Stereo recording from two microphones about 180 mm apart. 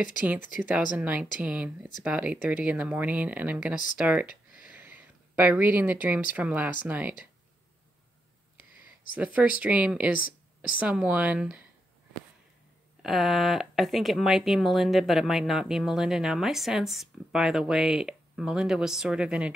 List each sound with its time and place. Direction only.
0.0 s speech: 10° right (ahead or behind)
9.1 s speech: 10° right (ahead or behind)
10.1 s a sound: 50° left (ahead or behind)
10.8 s speech: 5° right (ahead or behind)
13.0 s speech: centre (ahead or behind)